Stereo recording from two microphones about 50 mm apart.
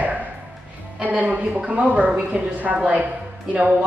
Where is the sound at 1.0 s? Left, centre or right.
Right.